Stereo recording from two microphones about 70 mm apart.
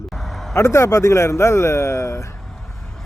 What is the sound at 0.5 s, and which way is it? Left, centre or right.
Speech, left.